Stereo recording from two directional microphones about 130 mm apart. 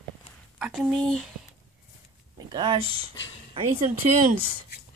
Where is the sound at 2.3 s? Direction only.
35° right (ahead or behind).